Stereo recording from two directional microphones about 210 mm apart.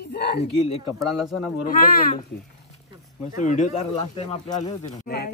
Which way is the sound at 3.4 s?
35° left (ahead or behind).